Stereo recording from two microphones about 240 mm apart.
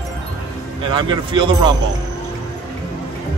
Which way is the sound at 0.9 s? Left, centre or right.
Centre.